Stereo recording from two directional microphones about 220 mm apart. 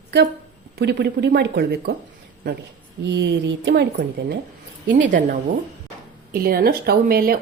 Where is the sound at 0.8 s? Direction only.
45° right (ahead or behind).